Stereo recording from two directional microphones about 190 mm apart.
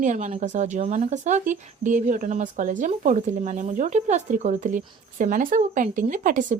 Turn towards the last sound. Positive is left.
turn(degrees=-45)  # may be behind; listen again after turning